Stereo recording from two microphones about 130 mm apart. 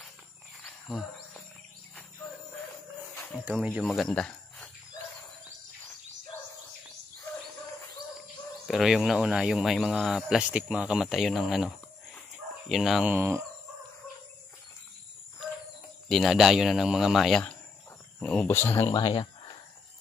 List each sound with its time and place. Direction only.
0.7 s cricket: centre (ahead or behind)
3.2 s a sound: 5° left (ahead or behind)
3.6 s speech: 5° right (ahead or behind)
8.6 s speech: centre (ahead or behind)
13.1 s speech: 20° right (ahead or behind)
16.1 s speech: centre (ahead or behind); by 18.9 s 15° left (ahead or behind)
18.9 s speech: 35° left (ahead or behind)